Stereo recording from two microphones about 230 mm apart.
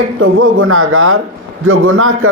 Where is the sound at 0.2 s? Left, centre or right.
Right.